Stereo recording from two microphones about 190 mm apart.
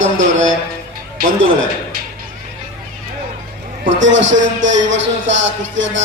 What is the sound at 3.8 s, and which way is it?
A man's voice, 75° right (ahead or behind).